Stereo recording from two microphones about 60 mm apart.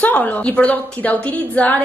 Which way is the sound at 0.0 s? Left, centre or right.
Left.